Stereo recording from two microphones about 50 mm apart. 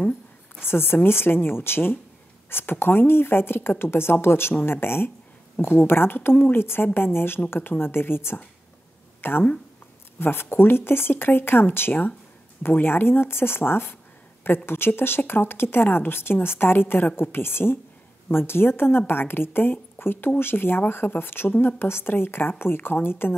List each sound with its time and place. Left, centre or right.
0.6 s speech: left